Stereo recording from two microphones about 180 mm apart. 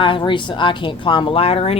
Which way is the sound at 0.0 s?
25° left (ahead or behind).